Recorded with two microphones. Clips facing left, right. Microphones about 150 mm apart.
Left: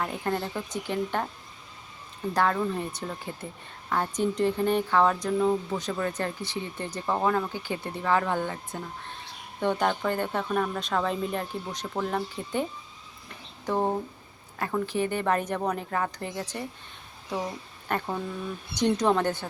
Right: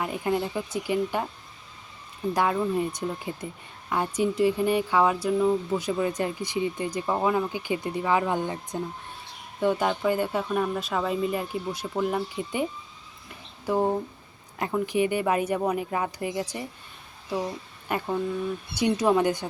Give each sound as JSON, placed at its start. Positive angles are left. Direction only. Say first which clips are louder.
{"t": 0.0, "sound": "speech", "louder": "right 3 dB", "side_deg": -10}
{"t": 2.3, "sound": "speech", "louder": "right 1 dB", "side_deg": -10}
{"t": 13.7, "sound": "speech", "louder": "right 2 dB", "side_deg": -10}
{"t": 17.8, "sound": "speech", "louder": "right 3 dB", "side_deg": -10}